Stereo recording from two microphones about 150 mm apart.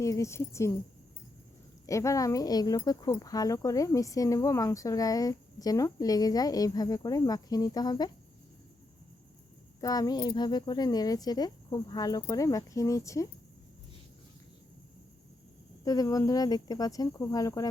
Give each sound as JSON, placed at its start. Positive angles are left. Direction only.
{"t": 0.0, "sound": "speech", "side_deg": 20}
{"t": 1.9, "sound": "speech", "side_deg": 20}
{"t": 9.8, "sound": "speech", "side_deg": 25}
{"t": 15.8, "sound": "speech", "side_deg": 25}